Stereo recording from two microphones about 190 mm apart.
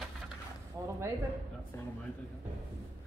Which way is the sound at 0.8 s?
15° right (ahead or behind).